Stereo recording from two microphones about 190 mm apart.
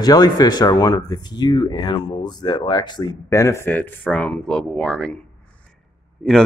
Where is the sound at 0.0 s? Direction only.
20° left (ahead or behind).